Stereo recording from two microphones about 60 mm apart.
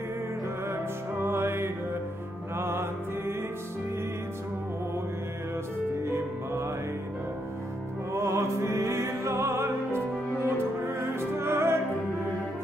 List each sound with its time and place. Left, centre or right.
0.7 s music: right
6.0 s music: right
8.1 s music: right